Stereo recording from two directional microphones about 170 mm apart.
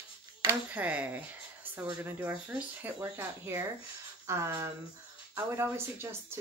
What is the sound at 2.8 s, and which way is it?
Speech, 15° right (ahead or behind).